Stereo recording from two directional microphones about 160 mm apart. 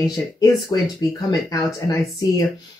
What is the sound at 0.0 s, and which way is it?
Speech, 25° left (ahead or behind).